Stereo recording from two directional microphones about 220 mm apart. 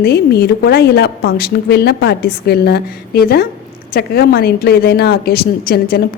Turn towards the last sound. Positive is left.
turn(degrees=45)  # may be behind; listen again after turning